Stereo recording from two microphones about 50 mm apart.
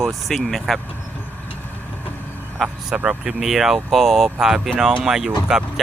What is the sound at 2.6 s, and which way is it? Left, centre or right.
Speech, centre.